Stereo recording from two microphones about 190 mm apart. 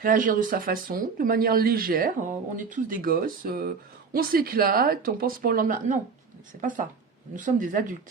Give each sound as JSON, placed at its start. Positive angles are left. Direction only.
{"t": 0.0, "sound": "speech", "side_deg": -45}